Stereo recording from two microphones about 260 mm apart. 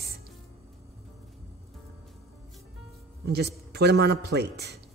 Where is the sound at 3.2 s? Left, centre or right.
Right.